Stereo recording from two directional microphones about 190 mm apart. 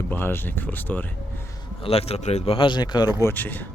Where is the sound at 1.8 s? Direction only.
30° left (ahead or behind).